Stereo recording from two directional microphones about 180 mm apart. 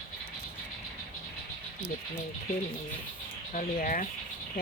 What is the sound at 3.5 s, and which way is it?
Speech, 50° left (ahead or behind).